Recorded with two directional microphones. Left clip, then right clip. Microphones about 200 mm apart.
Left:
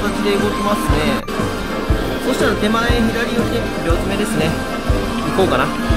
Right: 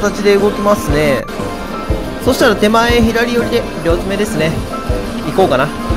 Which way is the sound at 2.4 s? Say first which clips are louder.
Right 8 dB; 30° right (ahead or behind).